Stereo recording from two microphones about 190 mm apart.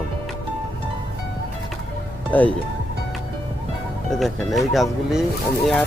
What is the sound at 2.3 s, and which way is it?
Speech, 10° left (ahead or behind).